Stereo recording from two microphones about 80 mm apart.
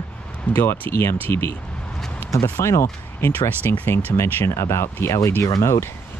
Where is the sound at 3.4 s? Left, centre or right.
Left.